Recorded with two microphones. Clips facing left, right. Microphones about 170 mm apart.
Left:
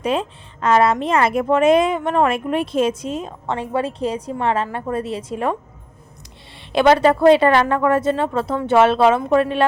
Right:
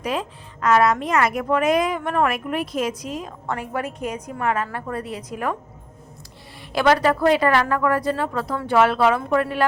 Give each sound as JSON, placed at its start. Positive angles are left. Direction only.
{"t": 0.0, "sound": "a woman's voice", "side_deg": 25}
{"t": 6.7, "sound": "a woman's voice", "side_deg": 25}